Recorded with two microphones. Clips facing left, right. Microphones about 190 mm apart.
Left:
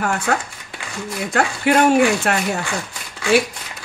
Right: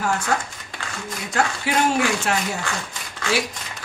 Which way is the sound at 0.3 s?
60° left (ahead or behind).